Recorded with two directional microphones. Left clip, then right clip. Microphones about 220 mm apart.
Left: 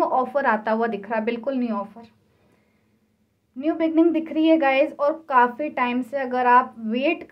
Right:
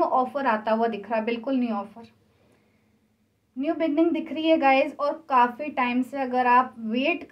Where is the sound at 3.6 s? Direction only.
50° left (ahead or behind).